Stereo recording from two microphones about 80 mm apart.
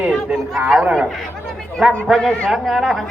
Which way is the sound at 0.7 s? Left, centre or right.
Centre.